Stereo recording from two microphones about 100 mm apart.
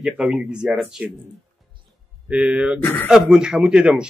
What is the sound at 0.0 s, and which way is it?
Speech, 5° right (ahead or behind).